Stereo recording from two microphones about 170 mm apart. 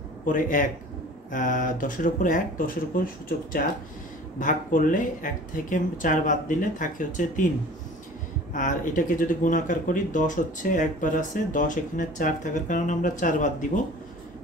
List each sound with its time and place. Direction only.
0.2 s speech: 50° left (ahead or behind)
8.5 s speech: 50° left (ahead or behind)